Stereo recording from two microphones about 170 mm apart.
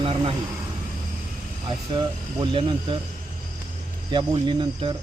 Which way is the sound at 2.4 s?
30° right (ahead or behind).